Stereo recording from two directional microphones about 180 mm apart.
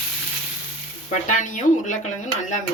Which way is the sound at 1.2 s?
45° left (ahead or behind).